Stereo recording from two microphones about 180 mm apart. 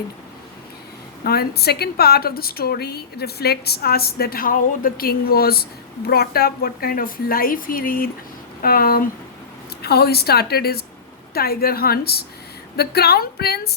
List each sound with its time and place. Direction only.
1.2 s a woman's voice: 60° left (ahead or behind)